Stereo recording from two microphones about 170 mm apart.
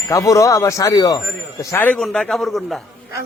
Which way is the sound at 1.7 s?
10° left (ahead or behind).